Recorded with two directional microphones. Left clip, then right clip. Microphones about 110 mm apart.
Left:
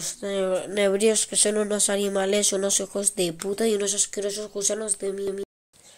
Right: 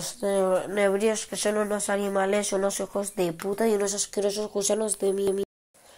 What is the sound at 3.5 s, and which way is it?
Speech, 80° left.